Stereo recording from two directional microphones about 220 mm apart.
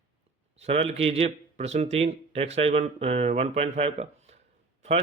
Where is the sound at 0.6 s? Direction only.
30° right (ahead or behind).